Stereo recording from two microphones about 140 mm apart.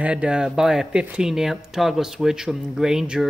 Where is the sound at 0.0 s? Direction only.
10° right (ahead or behind).